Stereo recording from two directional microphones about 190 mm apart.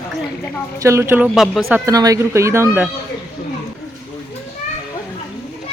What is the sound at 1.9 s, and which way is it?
Speech, 20° right (ahead or behind).